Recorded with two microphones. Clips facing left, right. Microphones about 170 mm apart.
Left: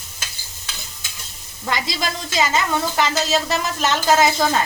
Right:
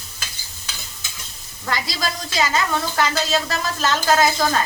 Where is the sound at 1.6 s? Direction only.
20° left (ahead or behind).